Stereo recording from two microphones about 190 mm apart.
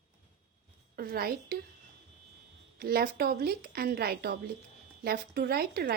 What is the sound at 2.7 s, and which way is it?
Speech, 55° right (ahead or behind).